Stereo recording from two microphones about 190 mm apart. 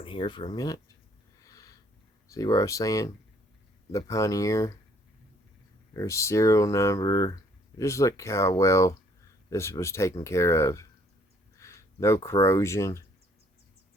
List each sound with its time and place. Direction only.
0.0 s speech: 25° left (ahead or behind)
1.4 s a sound: 20° left (ahead or behind)
2.3 s speech: 20° left (ahead or behind)
5.9 s speech: 15° left (ahead or behind)